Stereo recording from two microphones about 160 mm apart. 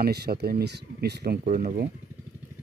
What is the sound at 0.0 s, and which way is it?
Speech, 85° right.